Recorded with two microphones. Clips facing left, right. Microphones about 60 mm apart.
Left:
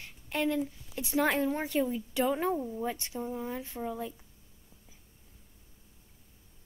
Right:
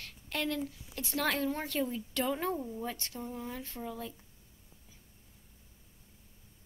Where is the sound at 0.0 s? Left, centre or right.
Centre.